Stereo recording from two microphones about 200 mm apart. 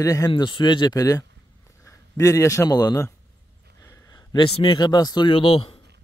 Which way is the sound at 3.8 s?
20° left (ahead or behind).